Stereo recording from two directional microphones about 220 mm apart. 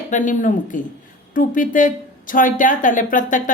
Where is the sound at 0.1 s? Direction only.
35° left (ahead or behind).